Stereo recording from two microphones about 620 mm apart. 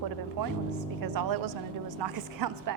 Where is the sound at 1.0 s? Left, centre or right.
Right.